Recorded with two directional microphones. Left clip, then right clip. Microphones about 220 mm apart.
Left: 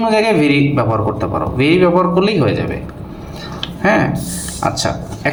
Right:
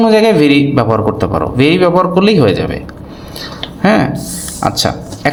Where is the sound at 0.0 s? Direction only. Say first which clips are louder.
Right 4 dB; 35° right (ahead or behind).